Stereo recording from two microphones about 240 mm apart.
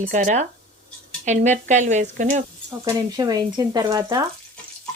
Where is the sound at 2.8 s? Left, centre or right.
Centre.